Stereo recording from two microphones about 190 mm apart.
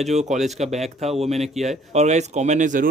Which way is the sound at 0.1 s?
35° right (ahead or behind).